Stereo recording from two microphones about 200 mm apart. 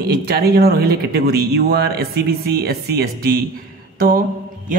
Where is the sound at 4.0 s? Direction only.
45° right (ahead or behind).